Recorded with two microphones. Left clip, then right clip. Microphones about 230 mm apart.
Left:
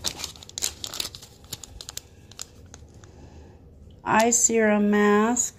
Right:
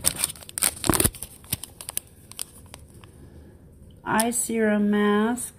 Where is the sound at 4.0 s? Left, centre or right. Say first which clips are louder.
Left 5 dB; centre.